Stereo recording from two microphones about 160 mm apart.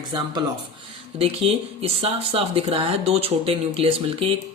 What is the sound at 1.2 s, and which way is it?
Speech, 40° right (ahead or behind).